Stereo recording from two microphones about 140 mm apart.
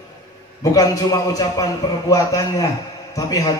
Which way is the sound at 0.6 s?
25° left (ahead or behind).